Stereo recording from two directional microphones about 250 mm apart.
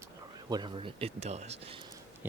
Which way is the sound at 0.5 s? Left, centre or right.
Centre.